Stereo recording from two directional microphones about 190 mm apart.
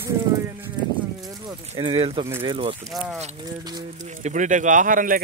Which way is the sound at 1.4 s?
25° right (ahead or behind).